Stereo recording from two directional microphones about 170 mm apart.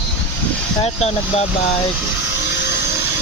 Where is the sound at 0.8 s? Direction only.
35° left (ahead or behind).